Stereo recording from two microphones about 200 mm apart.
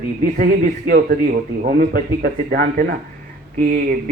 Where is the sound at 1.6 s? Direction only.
45° right (ahead or behind).